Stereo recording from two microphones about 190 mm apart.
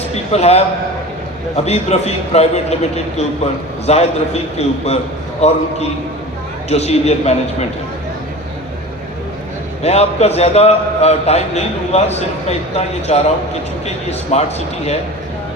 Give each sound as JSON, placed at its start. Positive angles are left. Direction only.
{"t": 0.1, "sound": "a man's voice", "side_deg": 35}
{"t": 9.8, "sound": "a man's voice", "side_deg": 35}